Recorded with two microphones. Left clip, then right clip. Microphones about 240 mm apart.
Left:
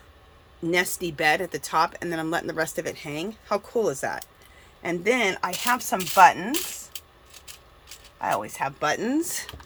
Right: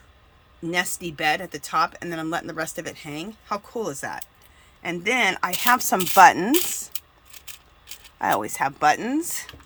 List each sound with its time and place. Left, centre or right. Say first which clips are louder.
0.7 s speech: left 1 dB; centre
5.7 s speech: right 4 dB; right
8.2 s speech: right 4 dB; right
8.9 s speech: right 3 dB; centre